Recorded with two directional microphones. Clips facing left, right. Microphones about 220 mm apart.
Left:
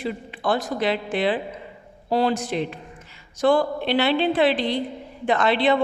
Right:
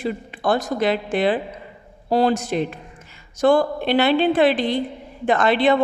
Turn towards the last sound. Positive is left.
turn(degrees=-50)  # may be behind; listen again after turning